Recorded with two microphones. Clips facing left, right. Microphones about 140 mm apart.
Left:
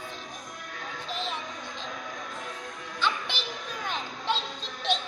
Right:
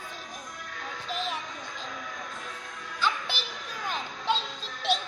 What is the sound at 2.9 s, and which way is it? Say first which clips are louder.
Music: even; 10° right (ahead or behind).